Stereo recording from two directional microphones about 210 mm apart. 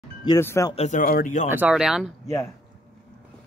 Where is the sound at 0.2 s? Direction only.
15° left (ahead or behind).